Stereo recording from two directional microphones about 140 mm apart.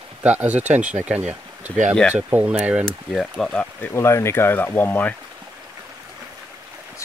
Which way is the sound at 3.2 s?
5° left (ahead or behind).